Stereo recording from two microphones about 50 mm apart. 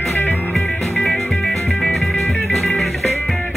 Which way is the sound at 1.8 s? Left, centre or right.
Centre.